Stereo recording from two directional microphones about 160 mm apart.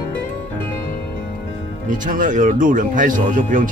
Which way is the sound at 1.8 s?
55° right (ahead or behind).